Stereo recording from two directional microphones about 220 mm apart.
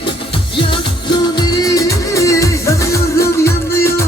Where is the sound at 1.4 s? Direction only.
15° left (ahead or behind).